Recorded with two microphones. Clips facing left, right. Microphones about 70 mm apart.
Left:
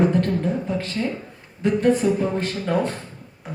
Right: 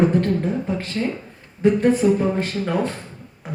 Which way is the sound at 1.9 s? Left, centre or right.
Left.